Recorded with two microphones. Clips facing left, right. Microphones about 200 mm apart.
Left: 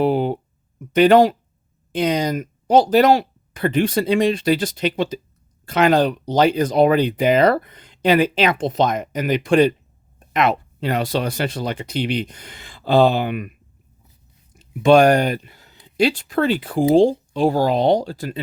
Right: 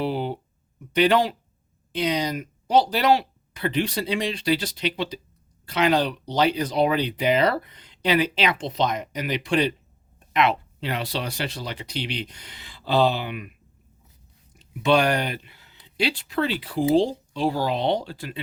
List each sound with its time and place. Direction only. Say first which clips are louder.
0.0 s a sound: left 8 dB; 50° left (ahead or behind)
0.9 s speech: left 7 dB; 45° left (ahead or behind)
14.5 s speech: left 7 dB; 45° left (ahead or behind)